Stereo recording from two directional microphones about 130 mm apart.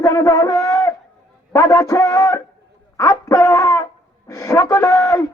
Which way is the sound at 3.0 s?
25° left (ahead or behind).